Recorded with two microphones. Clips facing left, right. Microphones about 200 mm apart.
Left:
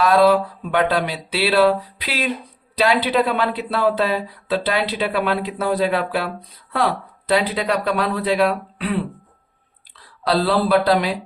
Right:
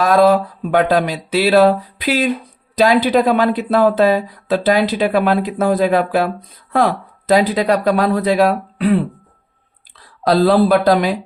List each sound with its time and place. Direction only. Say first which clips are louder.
0.0 s speech: right 3 dB; 45° right (ahead or behind)
10.2 s speech: right 6 dB; 45° right (ahead or behind)